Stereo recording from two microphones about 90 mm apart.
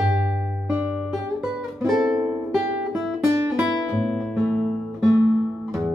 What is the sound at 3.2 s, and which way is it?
Music, 40° right (ahead or behind).